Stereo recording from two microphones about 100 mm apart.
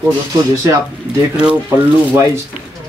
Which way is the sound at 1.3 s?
10° right (ahead or behind).